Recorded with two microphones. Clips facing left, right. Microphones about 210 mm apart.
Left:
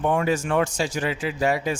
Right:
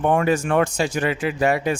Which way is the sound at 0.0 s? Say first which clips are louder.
Right 3 dB; 55° right (ahead or behind).